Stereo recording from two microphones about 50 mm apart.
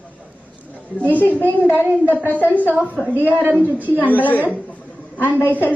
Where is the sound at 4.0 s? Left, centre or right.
Left.